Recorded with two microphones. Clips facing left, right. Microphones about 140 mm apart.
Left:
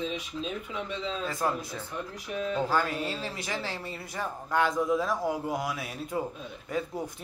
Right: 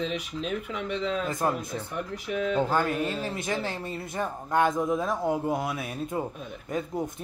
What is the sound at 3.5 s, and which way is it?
Speech, 50° right (ahead or behind).